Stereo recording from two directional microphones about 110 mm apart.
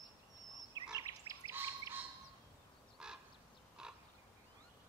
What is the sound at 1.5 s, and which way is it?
Bird, 20° right (ahead or behind).